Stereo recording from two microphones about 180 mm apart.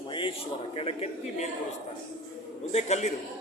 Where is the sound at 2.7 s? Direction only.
40° left (ahead or behind).